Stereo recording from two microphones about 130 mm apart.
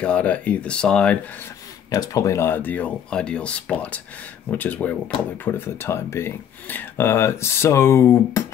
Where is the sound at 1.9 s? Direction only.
25° left (ahead or behind).